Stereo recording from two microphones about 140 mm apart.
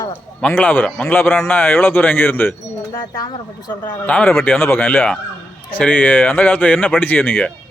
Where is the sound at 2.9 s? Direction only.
25° left (ahead or behind).